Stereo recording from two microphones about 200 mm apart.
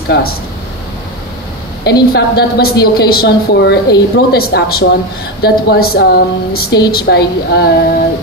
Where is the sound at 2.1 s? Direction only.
50° left (ahead or behind).